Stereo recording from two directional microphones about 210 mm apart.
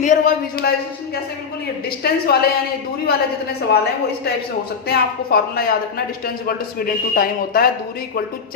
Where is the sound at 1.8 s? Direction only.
50° left (ahead or behind).